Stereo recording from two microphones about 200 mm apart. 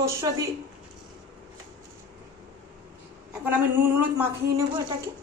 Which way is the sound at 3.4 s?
10° right (ahead or behind).